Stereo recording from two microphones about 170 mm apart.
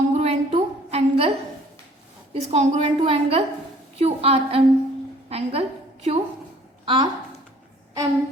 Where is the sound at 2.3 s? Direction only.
40° right (ahead or behind).